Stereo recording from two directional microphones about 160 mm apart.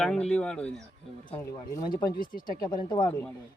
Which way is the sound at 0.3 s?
5° left (ahead or behind).